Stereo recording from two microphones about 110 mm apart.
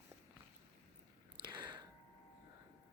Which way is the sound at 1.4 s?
45° right (ahead or behind).